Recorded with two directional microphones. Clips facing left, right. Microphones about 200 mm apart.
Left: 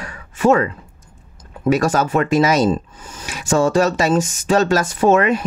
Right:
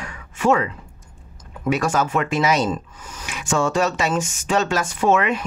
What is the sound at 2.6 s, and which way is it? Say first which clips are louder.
Speech: left 6 dB; 30° left (ahead or behind).